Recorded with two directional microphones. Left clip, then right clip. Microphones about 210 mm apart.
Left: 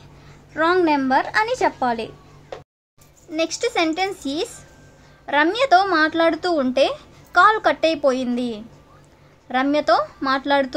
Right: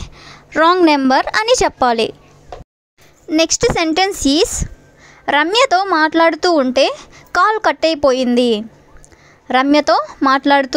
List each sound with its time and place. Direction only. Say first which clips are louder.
0.2 s a woman's voice: right 8 dB; 45° right (ahead or behind)
3.3 s a woman's voice: right 9 dB; 45° right (ahead or behind)